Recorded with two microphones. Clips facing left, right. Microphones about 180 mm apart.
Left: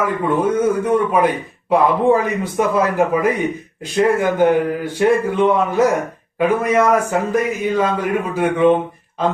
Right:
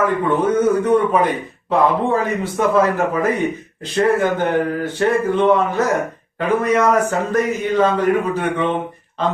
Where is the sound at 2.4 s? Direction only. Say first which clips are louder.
Right 1 dB; 10° left (ahead or behind).